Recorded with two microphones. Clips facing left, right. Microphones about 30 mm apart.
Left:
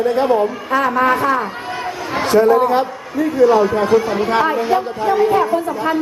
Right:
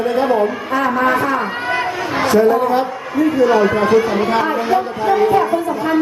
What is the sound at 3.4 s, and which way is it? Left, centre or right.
Speech, right.